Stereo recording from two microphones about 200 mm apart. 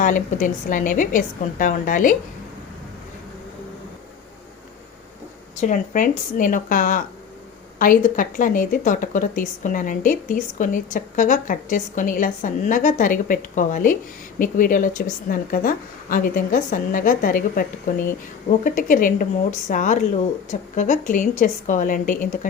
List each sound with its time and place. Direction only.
0.0 s a woman's voice: 40° left (ahead or behind)
5.5 s a woman's voice: 40° left (ahead or behind)